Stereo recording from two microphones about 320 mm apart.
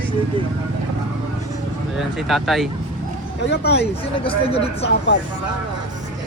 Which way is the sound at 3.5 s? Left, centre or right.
Left.